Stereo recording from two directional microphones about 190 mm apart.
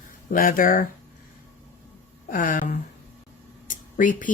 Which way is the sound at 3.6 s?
45° left (ahead or behind).